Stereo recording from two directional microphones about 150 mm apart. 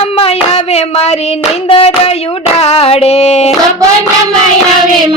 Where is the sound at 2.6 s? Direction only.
45° left (ahead or behind).